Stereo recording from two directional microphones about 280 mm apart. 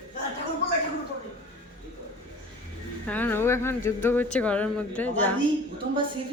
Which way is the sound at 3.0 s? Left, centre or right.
Centre.